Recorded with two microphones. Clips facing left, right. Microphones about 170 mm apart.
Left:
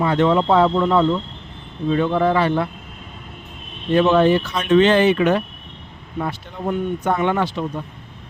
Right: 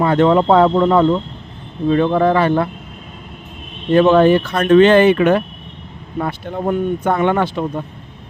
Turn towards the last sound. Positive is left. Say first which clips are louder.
# right 4 dB
turn(degrees=-55)  # may be behind; listen again after turning